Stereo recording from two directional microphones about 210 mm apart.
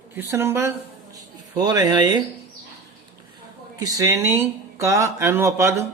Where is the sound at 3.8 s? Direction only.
15° right (ahead or behind).